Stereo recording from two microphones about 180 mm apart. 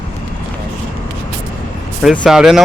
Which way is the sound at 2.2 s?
Centre (ahead or behind).